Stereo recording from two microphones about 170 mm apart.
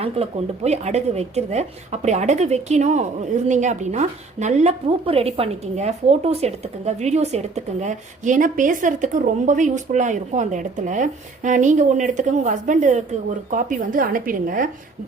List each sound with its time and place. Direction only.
0.0 s speech: 35° right (ahead or behind); by 14.7 s 55° right (ahead or behind)